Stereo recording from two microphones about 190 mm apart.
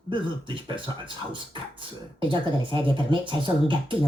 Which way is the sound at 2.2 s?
25° right (ahead or behind).